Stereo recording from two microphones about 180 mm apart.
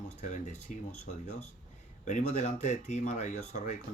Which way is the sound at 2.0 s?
40° left (ahead or behind).